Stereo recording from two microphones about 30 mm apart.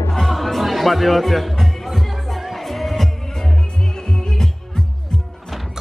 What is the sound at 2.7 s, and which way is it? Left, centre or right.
Heart sounds, centre.